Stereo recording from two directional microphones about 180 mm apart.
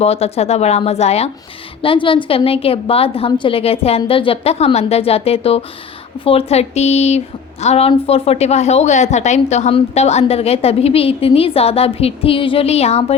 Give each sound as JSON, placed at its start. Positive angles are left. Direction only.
{"t": 0.0, "sound": "a woman's voice", "side_deg": 35}